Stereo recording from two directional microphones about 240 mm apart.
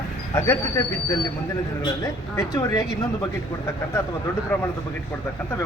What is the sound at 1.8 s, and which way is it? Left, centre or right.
Speech, centre.